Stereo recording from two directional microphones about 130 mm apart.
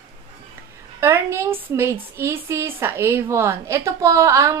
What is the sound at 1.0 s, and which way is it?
A woman's voice, 20° right (ahead or behind).